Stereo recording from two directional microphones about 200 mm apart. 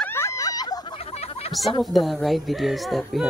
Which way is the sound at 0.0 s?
10° left (ahead or behind).